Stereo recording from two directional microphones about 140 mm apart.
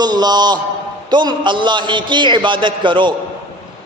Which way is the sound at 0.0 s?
30° right (ahead or behind).